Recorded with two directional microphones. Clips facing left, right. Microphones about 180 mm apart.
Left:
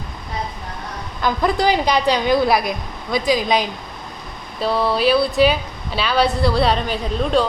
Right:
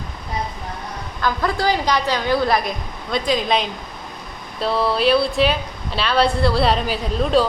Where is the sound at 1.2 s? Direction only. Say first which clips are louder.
Left 3 dB; 15° left (ahead or behind).